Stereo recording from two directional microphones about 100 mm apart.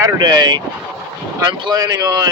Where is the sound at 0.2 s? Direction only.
50° right (ahead or behind).